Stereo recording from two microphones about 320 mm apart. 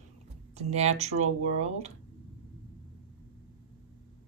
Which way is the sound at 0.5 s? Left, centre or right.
Centre.